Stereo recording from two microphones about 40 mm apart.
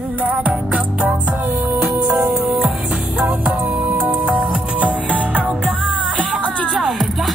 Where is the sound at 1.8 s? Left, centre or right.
Centre.